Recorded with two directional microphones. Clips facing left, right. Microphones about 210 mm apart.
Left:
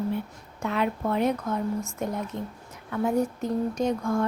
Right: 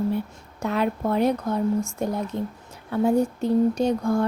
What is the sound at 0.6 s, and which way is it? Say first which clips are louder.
Speech: right 3 dB; 40° right (ahead or behind).